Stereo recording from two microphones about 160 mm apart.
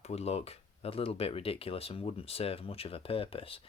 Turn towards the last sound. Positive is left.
turn(degrees=35)  # may be behind; listen again after turning